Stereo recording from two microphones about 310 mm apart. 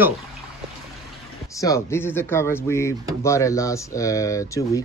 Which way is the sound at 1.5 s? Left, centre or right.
Centre.